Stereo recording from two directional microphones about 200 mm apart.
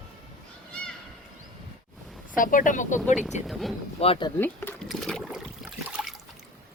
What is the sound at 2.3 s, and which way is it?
Speech, 40° left (ahead or behind).